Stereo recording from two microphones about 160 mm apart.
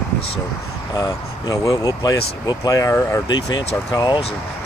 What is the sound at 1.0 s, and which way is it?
Speech, 20° left (ahead or behind).